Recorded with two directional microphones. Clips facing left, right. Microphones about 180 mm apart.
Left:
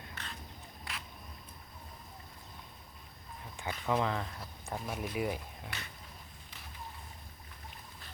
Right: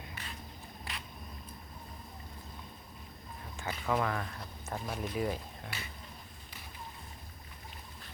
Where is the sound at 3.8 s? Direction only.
20° left (ahead or behind).